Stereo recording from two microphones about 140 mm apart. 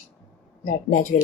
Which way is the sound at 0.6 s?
65° left (ahead or behind).